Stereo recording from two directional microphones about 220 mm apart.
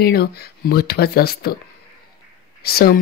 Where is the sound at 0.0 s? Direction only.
45° left (ahead or behind).